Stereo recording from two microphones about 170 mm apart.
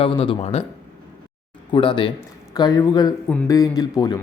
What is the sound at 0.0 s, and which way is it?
Speech, 35° left (ahead or behind).